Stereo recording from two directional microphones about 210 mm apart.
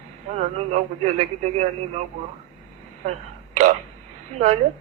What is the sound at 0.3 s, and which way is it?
Speech, 35° right (ahead or behind).